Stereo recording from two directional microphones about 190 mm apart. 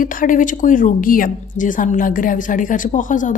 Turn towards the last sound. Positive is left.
turn(degrees=40)  # may be behind; listen again after turning